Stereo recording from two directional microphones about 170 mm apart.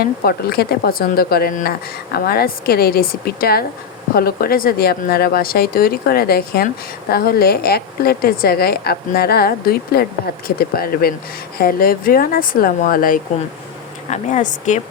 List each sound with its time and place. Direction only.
0.0 s a woman's voice: 65° left (ahead or behind)
14.1 s speech: 45° left (ahead or behind)